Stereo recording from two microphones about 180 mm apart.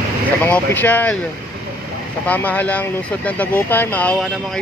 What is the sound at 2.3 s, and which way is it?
Speech, 10° left (ahead or behind).